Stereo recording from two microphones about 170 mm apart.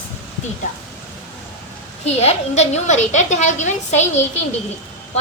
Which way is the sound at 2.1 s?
40° left (ahead or behind).